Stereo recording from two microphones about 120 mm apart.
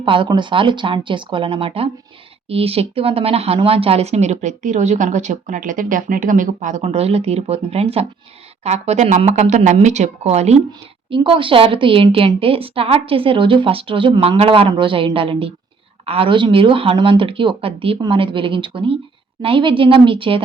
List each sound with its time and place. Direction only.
0.0 s a woman's voice: 45° right (ahead or behind); by 10.6 s 65° right (ahead or behind)
10.7 s a woman's voice: 45° right (ahead or behind)